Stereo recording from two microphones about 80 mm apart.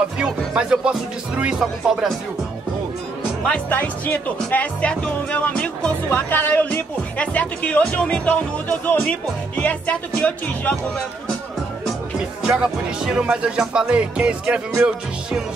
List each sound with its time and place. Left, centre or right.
0.2 s music: centre
3.4 s speech: centre
6.0 s speech: left
12.4 s music: centre